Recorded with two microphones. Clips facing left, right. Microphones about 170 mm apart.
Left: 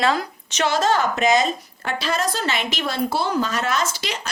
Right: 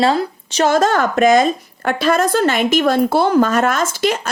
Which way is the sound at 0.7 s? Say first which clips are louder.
Right 4 dB; 50° right (ahead or behind).